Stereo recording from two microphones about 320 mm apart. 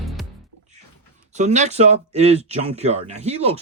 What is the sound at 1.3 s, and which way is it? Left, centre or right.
Speech, right.